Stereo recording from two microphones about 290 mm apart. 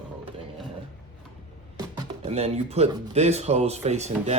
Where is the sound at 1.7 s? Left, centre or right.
Centre.